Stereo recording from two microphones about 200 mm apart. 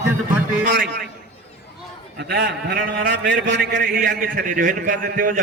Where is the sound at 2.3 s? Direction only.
55° right (ahead or behind).